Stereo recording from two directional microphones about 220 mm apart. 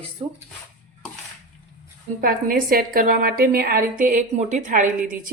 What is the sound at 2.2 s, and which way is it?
A woman's voice, 40° right (ahead or behind).